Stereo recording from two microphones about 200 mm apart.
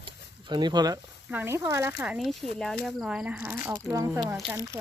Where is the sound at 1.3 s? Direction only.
10° right (ahead or behind).